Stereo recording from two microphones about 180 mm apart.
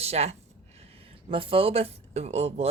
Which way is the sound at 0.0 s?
35° right (ahead or behind).